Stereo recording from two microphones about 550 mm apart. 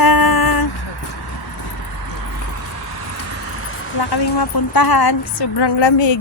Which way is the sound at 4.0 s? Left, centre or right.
Left.